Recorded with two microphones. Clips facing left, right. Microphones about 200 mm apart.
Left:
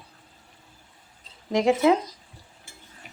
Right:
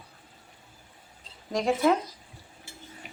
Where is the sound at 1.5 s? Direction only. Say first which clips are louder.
Left 4 dB; 20° left (ahead or behind).